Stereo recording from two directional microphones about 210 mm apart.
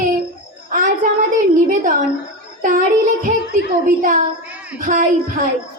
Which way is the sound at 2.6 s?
40° right (ahead or behind).